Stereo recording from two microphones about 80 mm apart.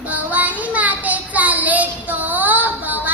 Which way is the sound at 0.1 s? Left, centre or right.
Centre.